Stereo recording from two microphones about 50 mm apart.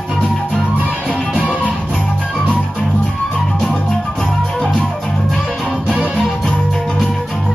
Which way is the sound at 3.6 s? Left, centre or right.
Centre.